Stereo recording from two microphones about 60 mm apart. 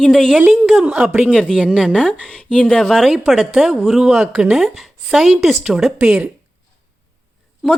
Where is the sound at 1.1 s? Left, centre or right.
Centre.